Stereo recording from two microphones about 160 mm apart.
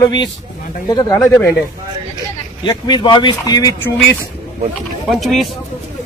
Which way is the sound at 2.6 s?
30° left (ahead or behind).